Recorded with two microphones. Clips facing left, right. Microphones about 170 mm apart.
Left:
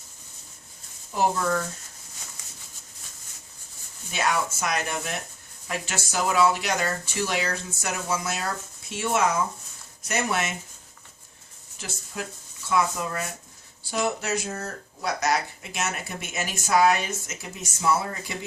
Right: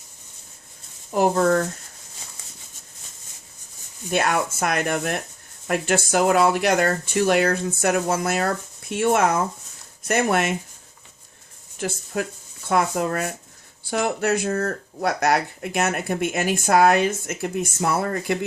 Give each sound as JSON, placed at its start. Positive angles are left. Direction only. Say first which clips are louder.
{"t": 1.1, "sound": "speech", "louder": "right 6 dB", "side_deg": -50}
{"t": 4.1, "sound": "speech", "louder": "right 4 dB", "side_deg": -55}
{"t": 11.8, "sound": "speech", "louder": "right 9 dB", "side_deg": -55}